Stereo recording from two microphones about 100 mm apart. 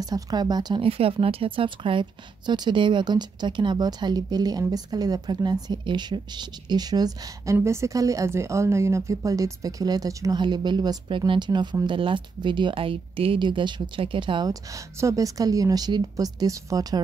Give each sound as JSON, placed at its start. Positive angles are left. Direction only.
{"t": 0.0, "sound": "speech", "side_deg": -40}
{"t": 0.8, "sound": "speech", "side_deg": -70}
{"t": 7.5, "sound": "a woman's voice", "side_deg": -30}
{"t": 10.4, "sound": "speech", "side_deg": -50}
{"t": 14.5, "sound": "a woman's voice", "side_deg": -30}